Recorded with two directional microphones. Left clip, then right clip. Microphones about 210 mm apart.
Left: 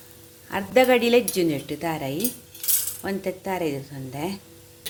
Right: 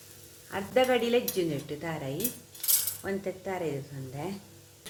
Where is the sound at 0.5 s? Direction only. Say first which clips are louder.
Left 7 dB; 45° left (ahead or behind).